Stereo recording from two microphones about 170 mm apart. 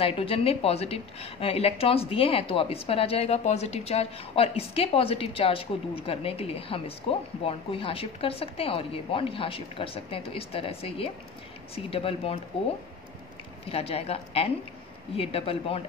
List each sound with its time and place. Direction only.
0.0 s a woman's voice: 35° left (ahead or behind)
13.7 s a woman's voice: 35° left (ahead or behind)